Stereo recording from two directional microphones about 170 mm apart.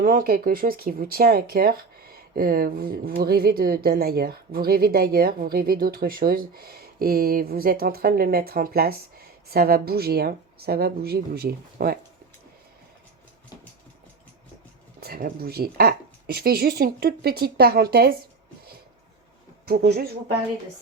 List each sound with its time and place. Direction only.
0.0 s speech: 55° right (ahead or behind)
15.0 s speech: 60° right (ahead or behind)
19.6 s speech: 65° right (ahead or behind)